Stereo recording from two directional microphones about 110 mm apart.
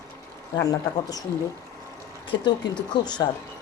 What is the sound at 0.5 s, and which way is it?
Speech, 35° left (ahead or behind).